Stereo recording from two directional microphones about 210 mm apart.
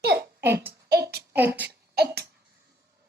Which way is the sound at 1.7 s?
50° right (ahead or behind).